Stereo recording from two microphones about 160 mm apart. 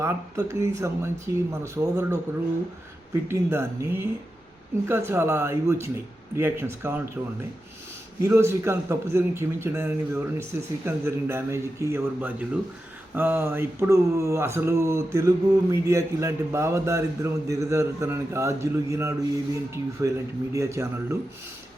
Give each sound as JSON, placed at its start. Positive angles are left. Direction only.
{"t": 0.0, "sound": "a man's voice", "side_deg": -20}
{"t": 8.2, "sound": "a man's voice", "side_deg": -15}